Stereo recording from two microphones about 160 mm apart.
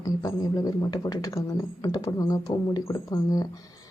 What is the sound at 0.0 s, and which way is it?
Speech, 20° left (ahead or behind).